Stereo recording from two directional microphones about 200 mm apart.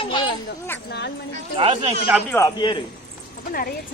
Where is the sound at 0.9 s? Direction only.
60° left (ahead or behind).